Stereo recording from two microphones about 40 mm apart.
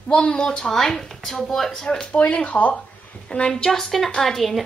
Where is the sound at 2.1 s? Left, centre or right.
Left.